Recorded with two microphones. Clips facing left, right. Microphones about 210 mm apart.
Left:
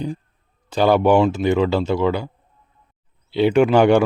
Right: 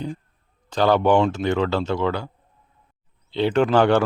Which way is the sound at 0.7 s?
10° left (ahead or behind).